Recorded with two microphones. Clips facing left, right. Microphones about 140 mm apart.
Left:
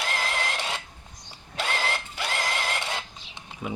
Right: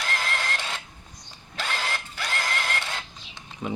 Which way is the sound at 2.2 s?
15° left (ahead or behind).